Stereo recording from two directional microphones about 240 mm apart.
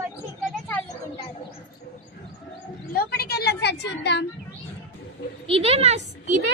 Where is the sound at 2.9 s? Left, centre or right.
Left.